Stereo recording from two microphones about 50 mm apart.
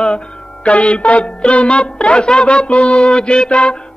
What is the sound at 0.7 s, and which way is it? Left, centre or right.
Music, left.